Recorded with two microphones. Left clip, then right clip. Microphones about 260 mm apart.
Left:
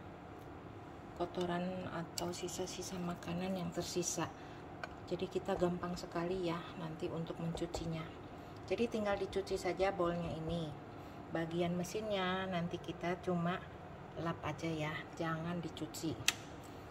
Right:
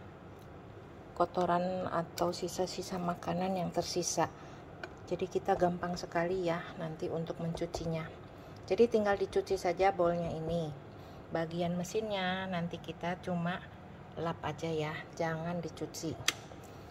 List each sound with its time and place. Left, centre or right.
1.3 s a woman's voice: centre
5.6 s a woman's voice: centre
15.6 s speech: right